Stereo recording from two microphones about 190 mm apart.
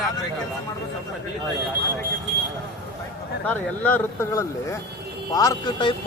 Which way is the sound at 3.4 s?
10° left (ahead or behind).